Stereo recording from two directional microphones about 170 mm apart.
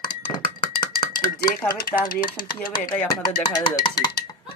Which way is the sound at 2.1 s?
55° left (ahead or behind).